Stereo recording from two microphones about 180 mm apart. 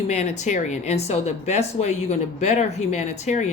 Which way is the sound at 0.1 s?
40° left (ahead or behind).